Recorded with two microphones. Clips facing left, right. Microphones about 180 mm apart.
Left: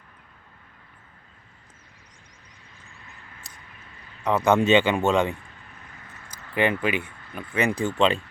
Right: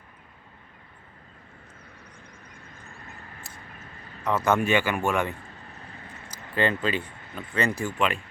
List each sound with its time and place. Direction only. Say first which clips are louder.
4.2 s speech: left 3 dB; 15° left (ahead or behind)
5.8 s vehicle: right 3 dB; 30° right (ahead or behind)
6.5 s speech: left 2 dB; 15° left (ahead or behind)